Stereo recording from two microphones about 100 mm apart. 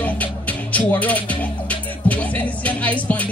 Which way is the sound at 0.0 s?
15° left (ahead or behind).